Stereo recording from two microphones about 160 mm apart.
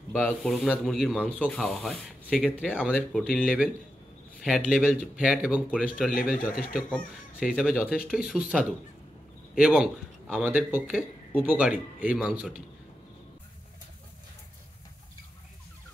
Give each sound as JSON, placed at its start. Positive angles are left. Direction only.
{"t": 0.1, "sound": "speech", "side_deg": -5}
{"t": 6.1, "sound": "speech", "side_deg": 65}
{"t": 7.3, "sound": "speech", "side_deg": -5}